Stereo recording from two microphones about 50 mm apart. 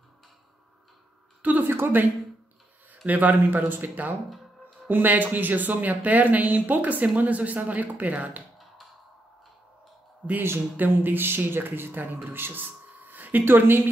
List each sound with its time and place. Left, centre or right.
1.6 s speech: right
3.1 s speech: right
10.2 s speech: right
10.8 s speech: right